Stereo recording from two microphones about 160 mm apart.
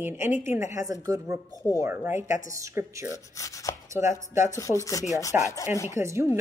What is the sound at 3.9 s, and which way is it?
Speech, 15° right (ahead or behind).